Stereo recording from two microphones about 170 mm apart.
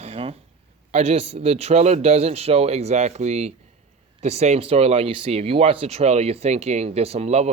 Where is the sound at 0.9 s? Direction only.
35° right (ahead or behind).